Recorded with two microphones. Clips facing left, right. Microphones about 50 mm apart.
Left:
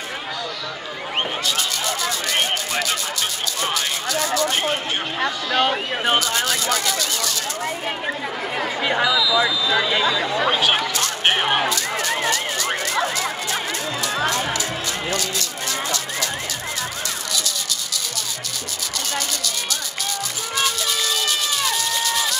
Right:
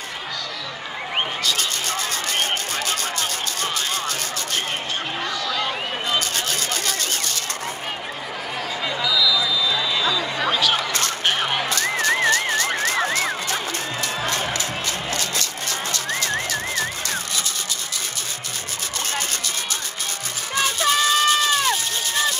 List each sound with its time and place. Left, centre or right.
1.6 s a sound: right
2.8 s speech: right
3.7 s a sound: right
5.6 s speech: left
6.8 s a sound: right
9.8 s speech: left
10.0 s speech: left
11.2 s a sound: left
11.7 s music: right
14.2 s music: left
14.5 s music: right
20.5 s crowd: right